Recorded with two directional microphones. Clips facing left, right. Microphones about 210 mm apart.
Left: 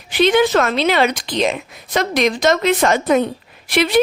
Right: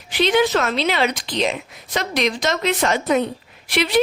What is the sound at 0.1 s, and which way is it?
Speech, 50° left (ahead or behind).